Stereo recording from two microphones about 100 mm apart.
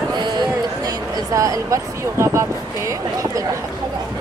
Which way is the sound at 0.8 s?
35° right (ahead or behind).